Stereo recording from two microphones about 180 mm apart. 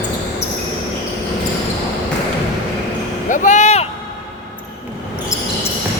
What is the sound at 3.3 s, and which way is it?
Vehicle, 45° left (ahead or behind).